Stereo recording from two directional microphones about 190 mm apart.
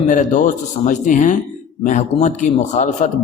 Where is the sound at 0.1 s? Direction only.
40° left (ahead or behind).